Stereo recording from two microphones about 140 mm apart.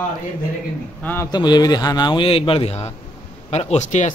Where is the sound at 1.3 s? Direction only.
30° left (ahead or behind).